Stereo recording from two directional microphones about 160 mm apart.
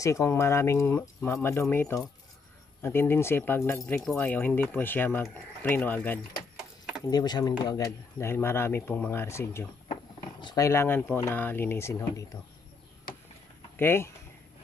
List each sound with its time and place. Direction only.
0.0 s speech: 20° left (ahead or behind)
3.8 s speech: 5° left (ahead or behind)
7.1 s speech: 25° left (ahead or behind)
13.7 s speech: 15° left (ahead or behind)